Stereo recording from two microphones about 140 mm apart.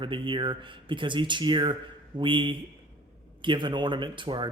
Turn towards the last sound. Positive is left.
turn(degrees=-35)  # may be behind; listen again after turning